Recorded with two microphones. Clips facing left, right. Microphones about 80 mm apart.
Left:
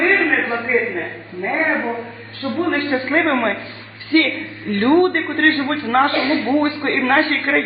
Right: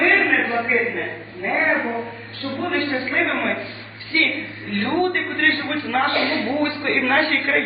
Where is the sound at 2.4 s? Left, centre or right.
Left.